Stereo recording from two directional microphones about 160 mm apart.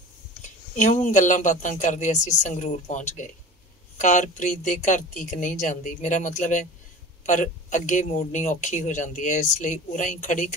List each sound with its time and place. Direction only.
0.7 s speech: 50° left (ahead or behind)